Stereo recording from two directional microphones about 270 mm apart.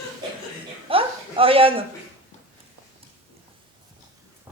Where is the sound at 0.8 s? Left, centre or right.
Centre.